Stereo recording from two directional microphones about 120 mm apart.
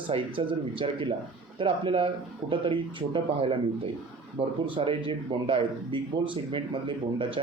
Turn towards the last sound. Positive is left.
turn(degrees=-45)  # may be behind; listen again after turning